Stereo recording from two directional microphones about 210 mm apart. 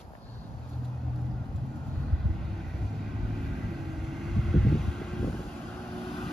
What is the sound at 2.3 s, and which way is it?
Vehicle, centre (ahead or behind).